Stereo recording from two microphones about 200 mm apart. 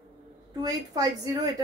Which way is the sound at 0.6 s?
20° right (ahead or behind).